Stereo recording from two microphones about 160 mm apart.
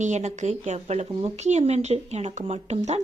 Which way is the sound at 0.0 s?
45° right (ahead or behind).